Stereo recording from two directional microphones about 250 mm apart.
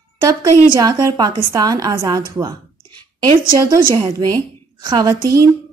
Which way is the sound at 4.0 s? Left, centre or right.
Centre.